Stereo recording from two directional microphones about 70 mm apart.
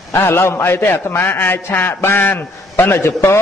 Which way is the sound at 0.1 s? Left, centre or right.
Left.